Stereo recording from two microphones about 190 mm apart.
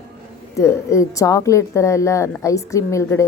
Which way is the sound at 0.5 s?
15° left (ahead or behind).